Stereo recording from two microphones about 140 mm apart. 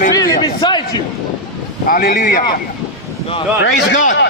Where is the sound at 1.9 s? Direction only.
90° left.